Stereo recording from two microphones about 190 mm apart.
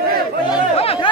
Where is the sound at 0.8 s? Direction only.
30° left (ahead or behind).